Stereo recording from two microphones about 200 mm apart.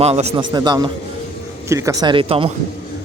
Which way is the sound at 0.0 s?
30° right (ahead or behind).